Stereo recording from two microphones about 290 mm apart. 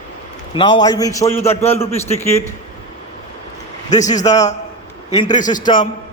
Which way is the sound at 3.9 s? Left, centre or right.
Left.